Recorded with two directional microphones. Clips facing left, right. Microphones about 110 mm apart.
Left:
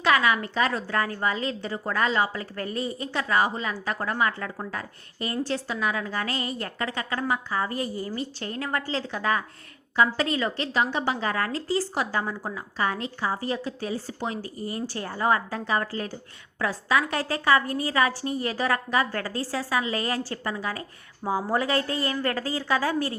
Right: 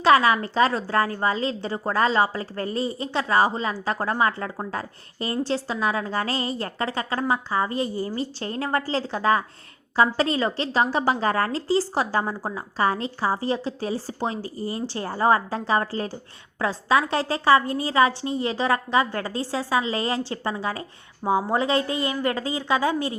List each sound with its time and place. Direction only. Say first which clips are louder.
0.0 s a woman's voice: right 5 dB; 35° right (ahead or behind)